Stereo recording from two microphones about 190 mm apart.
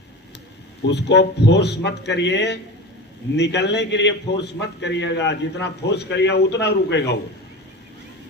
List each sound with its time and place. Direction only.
0.9 s a man's voice: 65° left (ahead or behind)